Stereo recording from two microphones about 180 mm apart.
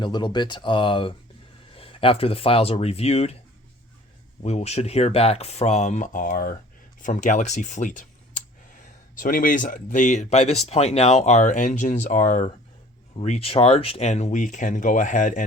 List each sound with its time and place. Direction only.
0.0 s speech: 25° left (ahead or behind)
4.4 s speech: 35° left (ahead or behind)